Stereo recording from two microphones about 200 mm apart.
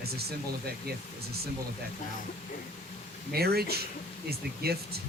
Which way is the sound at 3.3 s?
50° right (ahead or behind).